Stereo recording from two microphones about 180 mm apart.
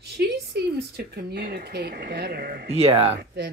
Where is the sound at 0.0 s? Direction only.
60° right (ahead or behind).